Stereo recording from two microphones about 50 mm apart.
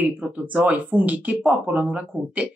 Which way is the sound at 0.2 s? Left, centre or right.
Right.